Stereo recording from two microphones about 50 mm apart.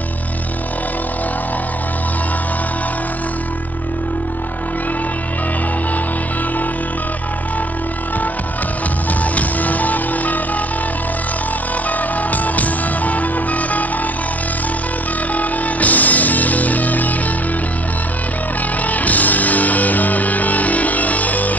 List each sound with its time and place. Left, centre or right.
9.2 s music: left
12.2 s music: left
15.3 s music: left
18.9 s music: left